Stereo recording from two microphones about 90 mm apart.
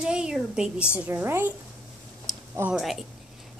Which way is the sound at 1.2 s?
25° right (ahead or behind).